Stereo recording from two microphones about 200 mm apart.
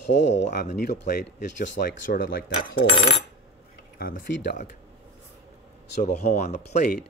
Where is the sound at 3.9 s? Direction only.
50° left (ahead or behind).